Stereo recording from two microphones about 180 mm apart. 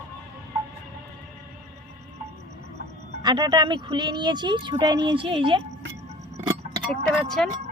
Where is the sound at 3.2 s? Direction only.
25° right (ahead or behind).